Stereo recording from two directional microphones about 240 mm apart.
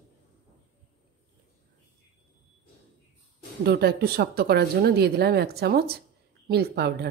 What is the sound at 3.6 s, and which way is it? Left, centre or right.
Speech, right.